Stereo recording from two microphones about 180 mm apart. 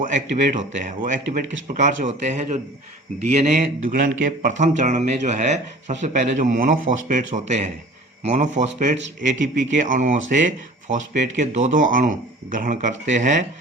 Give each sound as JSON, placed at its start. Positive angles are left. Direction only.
{"t": 0.0, "sound": "speech", "side_deg": -45}
{"t": 3.6, "sound": "a man's voice", "side_deg": -50}